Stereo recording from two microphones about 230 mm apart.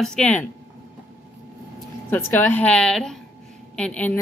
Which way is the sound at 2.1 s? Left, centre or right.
Centre.